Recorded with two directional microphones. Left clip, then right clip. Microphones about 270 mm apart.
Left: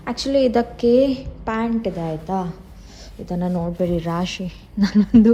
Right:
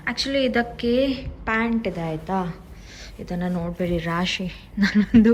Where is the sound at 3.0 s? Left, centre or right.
Centre.